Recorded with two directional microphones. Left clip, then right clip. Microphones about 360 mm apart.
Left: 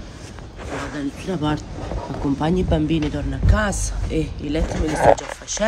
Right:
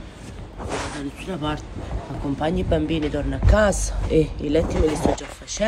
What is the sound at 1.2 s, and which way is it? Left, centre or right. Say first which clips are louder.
A man's voice: left 3 dB; centre.